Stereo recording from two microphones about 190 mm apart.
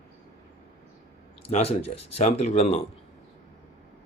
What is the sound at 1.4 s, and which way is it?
Speech, 35° left (ahead or behind).